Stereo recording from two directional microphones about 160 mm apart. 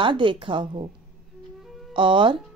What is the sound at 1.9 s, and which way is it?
Speech, 30° right (ahead or behind).